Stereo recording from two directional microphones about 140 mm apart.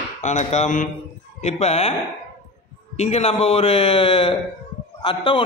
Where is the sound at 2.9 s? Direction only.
50° left (ahead or behind).